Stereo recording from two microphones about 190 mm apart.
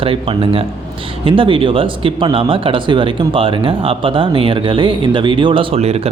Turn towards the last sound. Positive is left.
turn(degrees=-35)  # may be behind; listen again after turning